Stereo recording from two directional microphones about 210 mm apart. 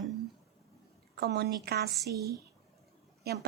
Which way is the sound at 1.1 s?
50° right (ahead or behind).